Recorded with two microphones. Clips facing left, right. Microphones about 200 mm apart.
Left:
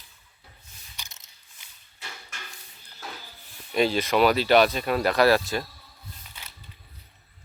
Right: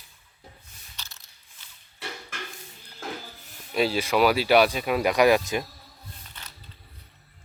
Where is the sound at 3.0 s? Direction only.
50° right (ahead or behind).